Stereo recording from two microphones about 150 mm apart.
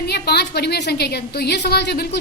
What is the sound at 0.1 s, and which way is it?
A woman's voice, 90° left.